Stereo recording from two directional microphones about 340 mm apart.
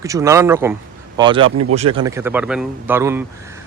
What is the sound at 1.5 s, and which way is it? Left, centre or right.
Speech, right.